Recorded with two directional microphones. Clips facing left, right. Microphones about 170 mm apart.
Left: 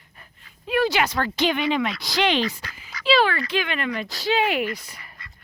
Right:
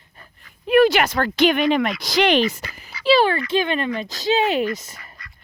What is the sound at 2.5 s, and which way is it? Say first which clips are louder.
Quack: right 4 dB; 40° right (ahead or behind).